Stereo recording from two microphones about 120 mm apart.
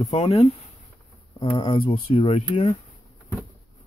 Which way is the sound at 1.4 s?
45° left (ahead or behind).